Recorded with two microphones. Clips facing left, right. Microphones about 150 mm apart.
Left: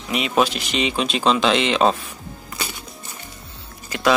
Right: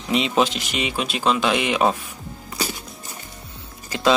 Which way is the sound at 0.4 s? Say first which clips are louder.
Left 1 dB; 15° right (ahead or behind).